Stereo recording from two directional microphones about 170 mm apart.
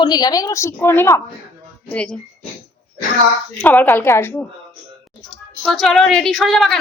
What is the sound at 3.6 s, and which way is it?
Speech, 10° left (ahead or behind).